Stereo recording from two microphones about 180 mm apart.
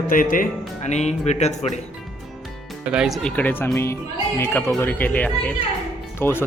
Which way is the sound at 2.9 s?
5° right (ahead or behind).